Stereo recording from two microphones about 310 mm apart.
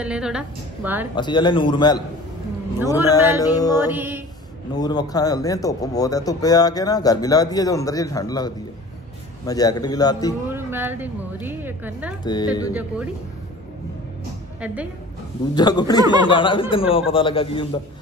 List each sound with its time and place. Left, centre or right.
0.0 s a woman's voice: centre
1.1 s speech: centre
3.8 s a woman's voice: centre
4.7 s speech: centre
10.5 s a woman's voice: centre
12.3 s speech: centre
15.5 s speech: centre
16.0 s a woman's voice: centre
16.3 s speech: centre